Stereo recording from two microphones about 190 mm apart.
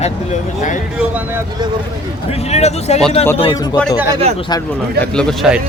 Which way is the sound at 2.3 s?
35° left (ahead or behind).